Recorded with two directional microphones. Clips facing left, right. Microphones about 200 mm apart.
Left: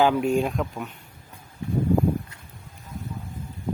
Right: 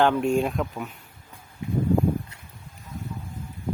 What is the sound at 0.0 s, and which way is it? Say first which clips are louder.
Speech: even; 5° left (ahead or behind).